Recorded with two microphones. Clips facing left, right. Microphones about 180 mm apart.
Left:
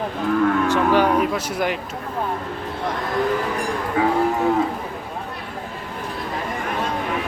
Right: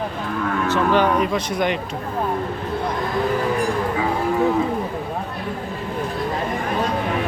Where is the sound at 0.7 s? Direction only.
10° left (ahead or behind).